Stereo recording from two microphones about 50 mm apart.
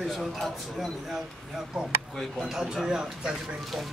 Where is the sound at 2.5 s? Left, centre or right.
Centre.